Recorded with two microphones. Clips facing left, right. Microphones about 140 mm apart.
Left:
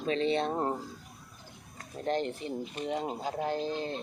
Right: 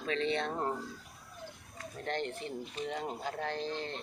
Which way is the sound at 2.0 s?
20° left (ahead or behind).